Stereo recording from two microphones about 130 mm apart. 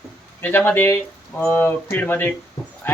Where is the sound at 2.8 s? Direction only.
15° left (ahead or behind).